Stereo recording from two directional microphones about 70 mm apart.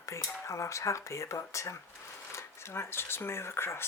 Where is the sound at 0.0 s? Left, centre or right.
Left.